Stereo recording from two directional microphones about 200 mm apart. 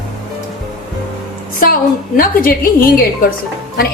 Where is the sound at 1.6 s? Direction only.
45° left (ahead or behind).